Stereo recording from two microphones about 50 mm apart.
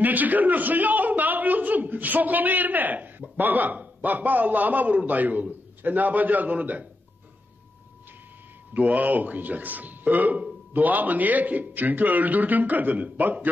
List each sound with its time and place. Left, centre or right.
0.0 s a man's voice: right
8.7 s a man's voice: right